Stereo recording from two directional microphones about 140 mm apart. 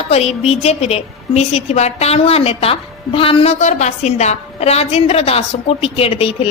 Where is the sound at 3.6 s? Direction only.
55° left (ahead or behind).